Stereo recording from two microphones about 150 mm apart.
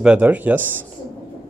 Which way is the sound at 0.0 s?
10° right (ahead or behind).